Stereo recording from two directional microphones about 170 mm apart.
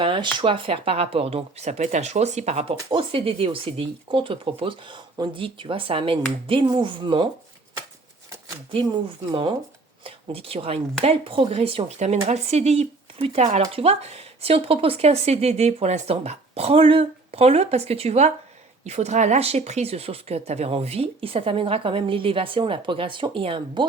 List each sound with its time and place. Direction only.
0.0 s speech: 30° right (ahead or behind)
2.7 s speech: 30° right (ahead or behind)
9.3 s speech: 30° right (ahead or behind)
13.4 s speech: 45° right (ahead or behind); by 23.8 s 30° right (ahead or behind)